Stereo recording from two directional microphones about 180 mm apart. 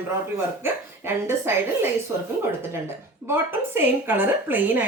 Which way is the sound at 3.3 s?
10° right (ahead or behind).